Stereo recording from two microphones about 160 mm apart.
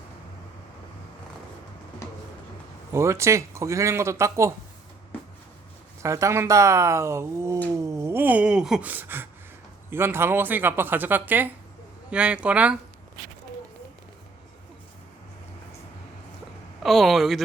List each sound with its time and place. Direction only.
2.9 s a man's voice: 20° right (ahead or behind)
6.0 s a man's voice: 20° right (ahead or behind)
16.8 s speech: centre (ahead or behind)